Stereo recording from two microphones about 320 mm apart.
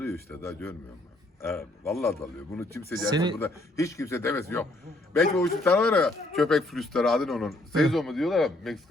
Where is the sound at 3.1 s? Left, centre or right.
Centre.